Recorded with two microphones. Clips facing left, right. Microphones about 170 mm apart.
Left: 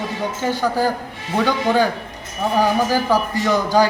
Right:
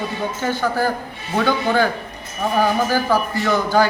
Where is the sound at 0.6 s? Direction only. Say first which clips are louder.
Left 1 dB; 10° left (ahead or behind).